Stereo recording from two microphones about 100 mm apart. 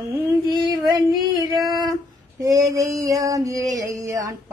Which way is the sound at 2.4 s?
35° right (ahead or behind).